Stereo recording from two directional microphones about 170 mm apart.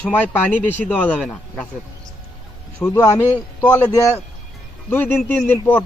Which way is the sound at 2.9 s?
20° left (ahead or behind).